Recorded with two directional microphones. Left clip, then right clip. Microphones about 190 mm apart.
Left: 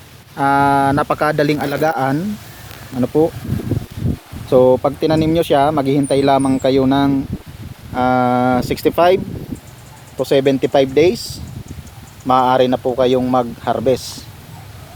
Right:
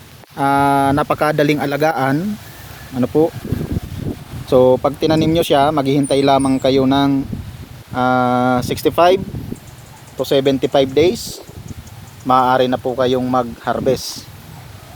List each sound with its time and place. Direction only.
0.3 s speech: 5° right (ahead or behind)
3.0 s speech: centre (ahead or behind)
4.4 s speech: 5° left (ahead or behind)
10.2 s speech: 10° left (ahead or behind)
12.3 s speech: 10° left (ahead or behind)